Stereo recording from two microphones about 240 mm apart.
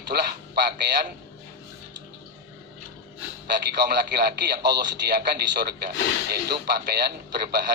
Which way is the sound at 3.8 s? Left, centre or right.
Right.